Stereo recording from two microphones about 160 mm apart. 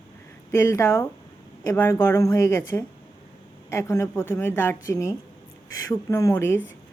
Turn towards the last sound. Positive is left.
turn(degrees=15)  # may be behind; listen again after turning